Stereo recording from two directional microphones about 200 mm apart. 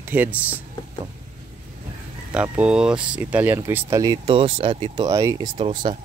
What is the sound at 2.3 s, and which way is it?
Speech, 5° right (ahead or behind).